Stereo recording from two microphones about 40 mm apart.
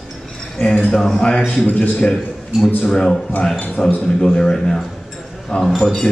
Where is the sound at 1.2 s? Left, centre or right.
Left.